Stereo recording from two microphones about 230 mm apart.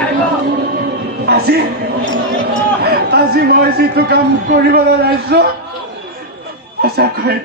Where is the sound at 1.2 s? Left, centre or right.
Right.